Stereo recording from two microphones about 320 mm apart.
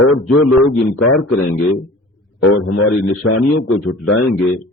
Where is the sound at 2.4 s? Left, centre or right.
Left.